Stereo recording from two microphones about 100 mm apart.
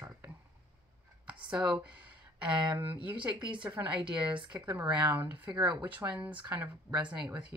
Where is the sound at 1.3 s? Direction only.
10° right (ahead or behind).